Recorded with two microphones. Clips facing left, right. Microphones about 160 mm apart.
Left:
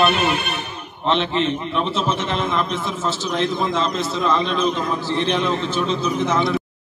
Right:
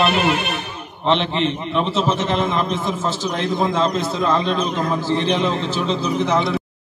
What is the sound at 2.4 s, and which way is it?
A man's voice, 40° right (ahead or behind).